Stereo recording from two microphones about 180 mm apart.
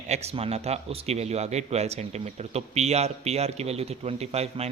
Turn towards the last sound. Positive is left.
turn(degrees=-35)  # may be behind; listen again after turning